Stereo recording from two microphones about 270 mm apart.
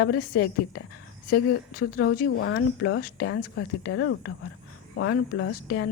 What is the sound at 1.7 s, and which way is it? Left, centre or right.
Speech, left.